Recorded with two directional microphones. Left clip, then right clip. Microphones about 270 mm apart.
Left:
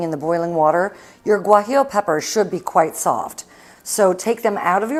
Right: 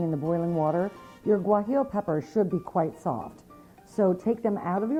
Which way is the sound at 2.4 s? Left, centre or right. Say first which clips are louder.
Left 10 dB; centre.